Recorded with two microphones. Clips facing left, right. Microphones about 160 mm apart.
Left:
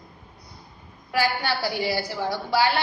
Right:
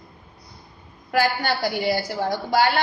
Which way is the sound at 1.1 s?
50° right (ahead or behind).